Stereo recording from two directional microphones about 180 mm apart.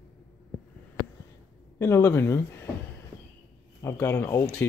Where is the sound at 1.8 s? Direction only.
15° left (ahead or behind).